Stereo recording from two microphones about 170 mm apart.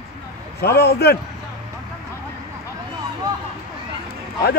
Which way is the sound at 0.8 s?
70° left (ahead or behind).